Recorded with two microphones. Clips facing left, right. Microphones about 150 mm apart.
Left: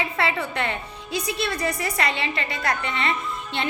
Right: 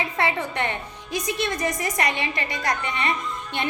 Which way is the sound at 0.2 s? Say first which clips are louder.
Right 1 dB; 15° right (ahead or behind).